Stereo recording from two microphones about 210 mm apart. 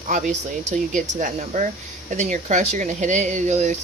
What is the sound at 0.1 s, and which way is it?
Speech, 35° right (ahead or behind).